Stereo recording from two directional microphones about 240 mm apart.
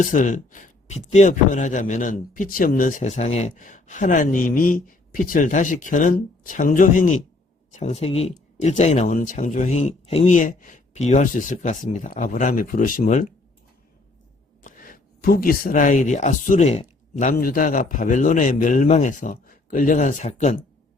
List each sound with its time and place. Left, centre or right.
0.0 s speech: left
14.6 s speech: left